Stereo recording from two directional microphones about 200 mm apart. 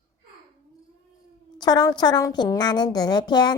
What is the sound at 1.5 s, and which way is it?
A woman's voice, 20° left (ahead or behind).